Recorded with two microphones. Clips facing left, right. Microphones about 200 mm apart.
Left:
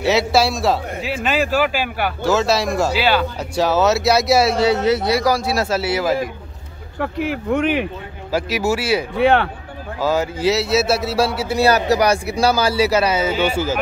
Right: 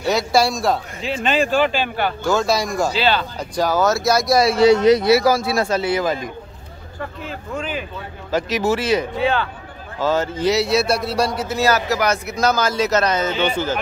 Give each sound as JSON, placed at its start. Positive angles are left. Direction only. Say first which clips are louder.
{"t": 0.3, "sound": "a man's voice", "louder": "left 1 dB", "side_deg": 0}
{"t": 7.0, "sound": "speech", "louder": "left 8 dB", "side_deg": 70}
{"t": 8.3, "sound": "a man's voice", "louder": "even", "side_deg": 10}
{"t": 9.1, "sound": "speech", "louder": "left 5 dB", "side_deg": 65}
{"t": 9.9, "sound": "a man's voice", "louder": "even", "side_deg": 10}